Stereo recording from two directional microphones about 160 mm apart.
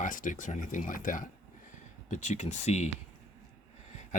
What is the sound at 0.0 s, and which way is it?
Speech, 55° left (ahead or behind).